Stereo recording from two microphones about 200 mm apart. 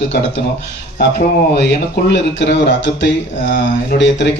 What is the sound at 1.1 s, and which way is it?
Speech, 55° left (ahead or behind).